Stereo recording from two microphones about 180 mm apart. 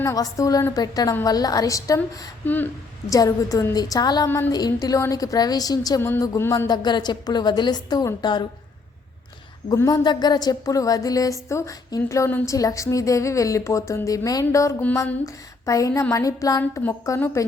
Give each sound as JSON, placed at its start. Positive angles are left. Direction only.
{"t": 0.0, "sound": "a woman's voice", "side_deg": 20}
{"t": 3.1, "sound": "a woman's voice", "side_deg": 20}
{"t": 9.6, "sound": "a sound", "side_deg": 20}